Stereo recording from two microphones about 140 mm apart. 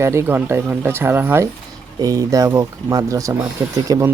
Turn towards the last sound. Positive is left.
turn(degrees=-20)  # may be behind; listen again after turning